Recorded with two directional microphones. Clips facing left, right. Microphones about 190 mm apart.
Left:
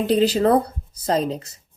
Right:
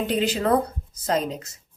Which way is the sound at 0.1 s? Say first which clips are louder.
Left 6 dB; 35° left (ahead or behind).